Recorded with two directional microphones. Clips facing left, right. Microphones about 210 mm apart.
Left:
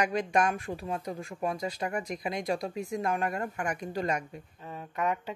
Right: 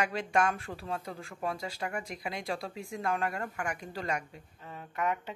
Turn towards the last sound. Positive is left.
turn(degrees=20)  # may be behind; listen again after turning